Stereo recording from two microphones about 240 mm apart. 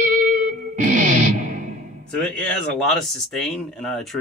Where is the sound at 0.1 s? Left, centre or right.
Right.